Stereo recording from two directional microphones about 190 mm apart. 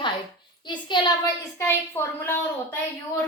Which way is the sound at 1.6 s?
15° left (ahead or behind).